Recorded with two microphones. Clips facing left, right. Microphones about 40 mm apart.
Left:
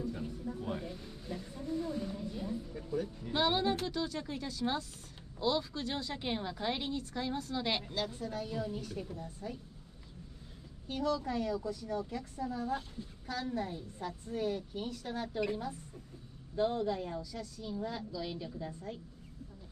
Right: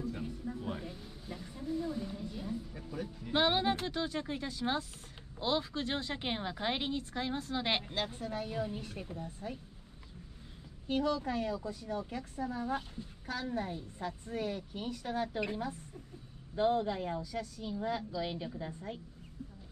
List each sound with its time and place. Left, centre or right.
0.6 s speech: centre; by 9.6 s right
10.9 s speech: right